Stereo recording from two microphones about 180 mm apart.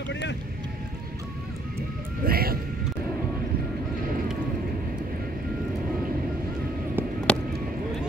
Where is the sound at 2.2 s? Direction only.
55° right (ahead or behind).